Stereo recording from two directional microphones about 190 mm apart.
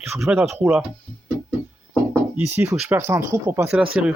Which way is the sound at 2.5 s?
10° right (ahead or behind).